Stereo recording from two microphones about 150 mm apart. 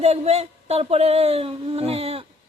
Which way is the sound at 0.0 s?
45° right (ahead or behind).